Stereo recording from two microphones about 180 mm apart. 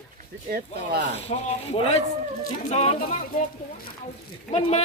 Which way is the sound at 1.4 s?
35° left (ahead or behind).